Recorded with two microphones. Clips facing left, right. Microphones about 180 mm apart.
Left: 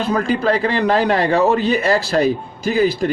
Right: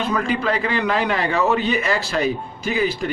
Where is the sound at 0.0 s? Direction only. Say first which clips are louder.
Left 4 dB; 35° left (ahead or behind).